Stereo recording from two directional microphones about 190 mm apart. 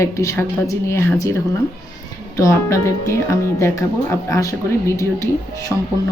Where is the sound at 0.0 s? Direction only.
15° left (ahead or behind).